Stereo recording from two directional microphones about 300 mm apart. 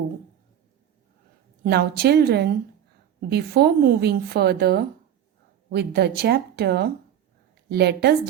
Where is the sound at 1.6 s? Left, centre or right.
Right.